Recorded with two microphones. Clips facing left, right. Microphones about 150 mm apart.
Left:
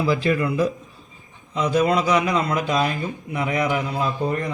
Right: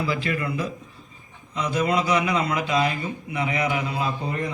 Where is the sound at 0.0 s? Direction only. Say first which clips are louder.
Left 5 dB; 35° left (ahead or behind).